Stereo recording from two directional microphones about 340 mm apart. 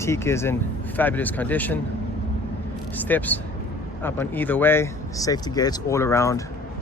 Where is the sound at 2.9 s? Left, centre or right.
Centre.